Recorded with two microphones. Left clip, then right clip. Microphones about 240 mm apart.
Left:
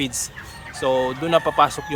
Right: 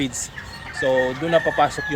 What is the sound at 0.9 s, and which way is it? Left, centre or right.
Speech, left.